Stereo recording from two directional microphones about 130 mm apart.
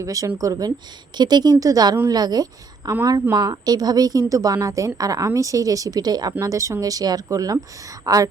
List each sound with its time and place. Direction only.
0.0 s a woman's voice: 25° right (ahead or behind)